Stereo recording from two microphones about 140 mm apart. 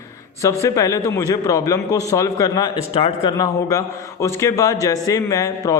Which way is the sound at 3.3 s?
25° left (ahead or behind).